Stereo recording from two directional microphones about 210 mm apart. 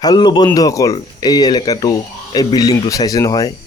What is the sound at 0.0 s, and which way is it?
A man's voice, 20° left (ahead or behind).